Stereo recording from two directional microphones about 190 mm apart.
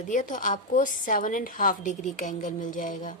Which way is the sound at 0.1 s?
40° left (ahead or behind).